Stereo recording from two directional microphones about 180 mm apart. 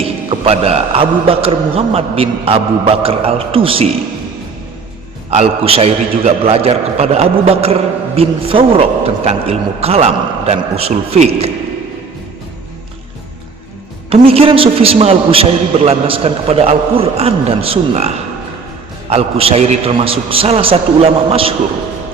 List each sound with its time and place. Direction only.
0.0 s a man's voice: 35° right (ahead or behind)
5.3 s a man's voice: 35° right (ahead or behind)
14.1 s a man's voice: 30° right (ahead or behind)